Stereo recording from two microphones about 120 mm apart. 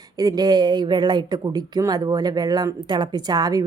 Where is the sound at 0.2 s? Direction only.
35° right (ahead or behind).